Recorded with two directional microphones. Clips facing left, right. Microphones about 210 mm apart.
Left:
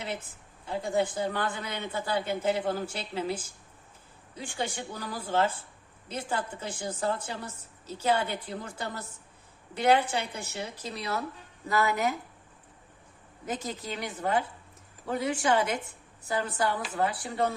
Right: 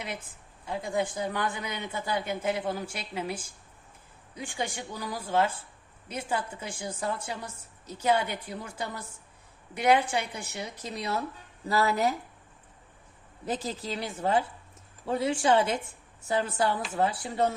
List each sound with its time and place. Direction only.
0.9 s a woman's voice: 10° right (ahead or behind)
11.7 s a woman's voice: 35° right (ahead or behind)
13.4 s a woman's voice: 30° right (ahead or behind)